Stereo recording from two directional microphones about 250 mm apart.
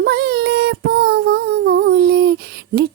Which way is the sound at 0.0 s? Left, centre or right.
Right.